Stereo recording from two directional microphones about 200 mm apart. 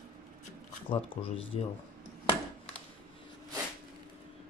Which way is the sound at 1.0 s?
70° left (ahead or behind).